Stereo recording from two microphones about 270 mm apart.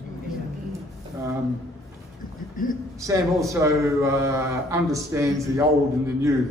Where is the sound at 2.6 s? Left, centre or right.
Left.